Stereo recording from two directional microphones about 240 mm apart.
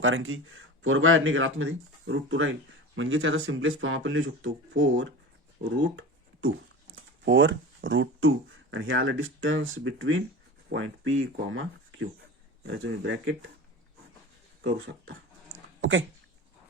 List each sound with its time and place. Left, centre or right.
0.0 s speech: right
5.7 s a sound: right
7.3 s speech: right
14.6 s speech: right